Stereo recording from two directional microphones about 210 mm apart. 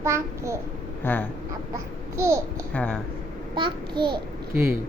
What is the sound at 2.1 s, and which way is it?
Speech, 15° right (ahead or behind).